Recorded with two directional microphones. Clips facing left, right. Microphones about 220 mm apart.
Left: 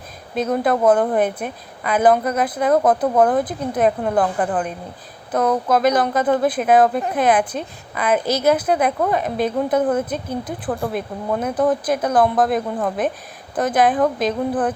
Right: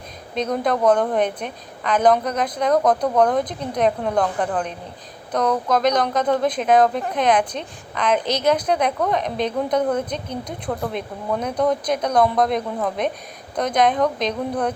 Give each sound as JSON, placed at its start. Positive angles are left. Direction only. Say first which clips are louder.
{"t": 0.3, "sound": "a woman's voice", "louder": "left 3 dB", "side_deg": 5}